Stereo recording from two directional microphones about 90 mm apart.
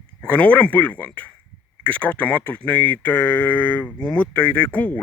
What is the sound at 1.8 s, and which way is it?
Speech, 15° left (ahead or behind).